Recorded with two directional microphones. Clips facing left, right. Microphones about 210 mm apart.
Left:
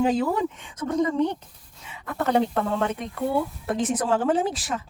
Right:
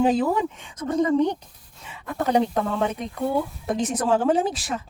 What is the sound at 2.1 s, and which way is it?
Speech, 15° right (ahead or behind).